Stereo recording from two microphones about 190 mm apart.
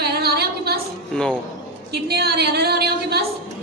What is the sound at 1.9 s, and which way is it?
A woman's voice, 55° right (ahead or behind).